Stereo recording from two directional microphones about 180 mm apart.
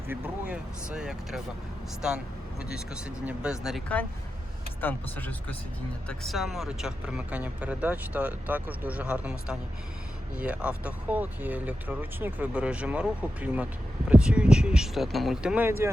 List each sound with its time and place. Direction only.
0.1 s speech: 5° right (ahead or behind)